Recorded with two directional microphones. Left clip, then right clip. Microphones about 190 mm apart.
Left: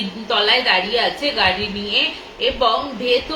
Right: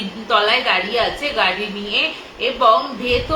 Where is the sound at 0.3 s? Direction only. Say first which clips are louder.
Even; 15° right (ahead or behind).